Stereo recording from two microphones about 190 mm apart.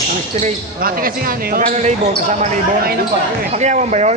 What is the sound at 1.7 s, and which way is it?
Speech, 40° right (ahead or behind).